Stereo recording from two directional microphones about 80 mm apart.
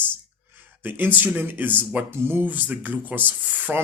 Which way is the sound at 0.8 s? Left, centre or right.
Right.